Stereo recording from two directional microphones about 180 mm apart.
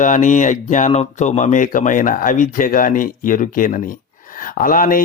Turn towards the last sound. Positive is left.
turn(degrees=50)  # may be behind; listen again after turning